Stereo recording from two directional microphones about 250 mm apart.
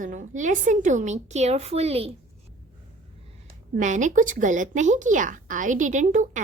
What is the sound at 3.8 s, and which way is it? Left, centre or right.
A woman's voice, right.